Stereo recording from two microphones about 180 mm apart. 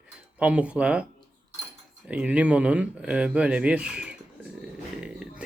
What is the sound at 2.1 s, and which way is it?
Speech, 5° right (ahead or behind).